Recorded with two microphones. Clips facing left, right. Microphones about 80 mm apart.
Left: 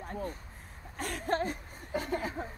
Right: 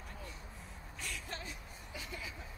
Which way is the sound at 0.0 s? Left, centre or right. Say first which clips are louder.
Left 12 dB; left.